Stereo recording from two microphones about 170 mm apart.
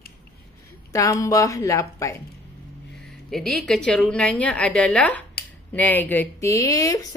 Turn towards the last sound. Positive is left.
turn(degrees=20)  # may be behind; listen again after turning